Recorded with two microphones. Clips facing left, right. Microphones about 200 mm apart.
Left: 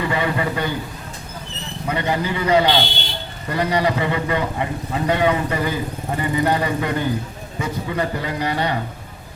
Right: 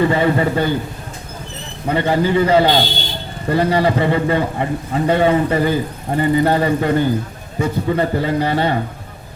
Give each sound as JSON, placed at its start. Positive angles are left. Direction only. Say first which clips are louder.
{"t": 0.0, "sound": "a man's voice", "louder": "right 6 dB", "side_deg": -35}
{"t": 1.9, "sound": "a man's voice", "louder": "right 6 dB", "side_deg": -30}